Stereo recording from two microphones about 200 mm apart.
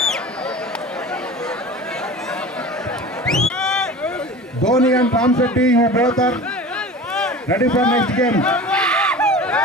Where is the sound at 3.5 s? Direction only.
5° left (ahead or behind).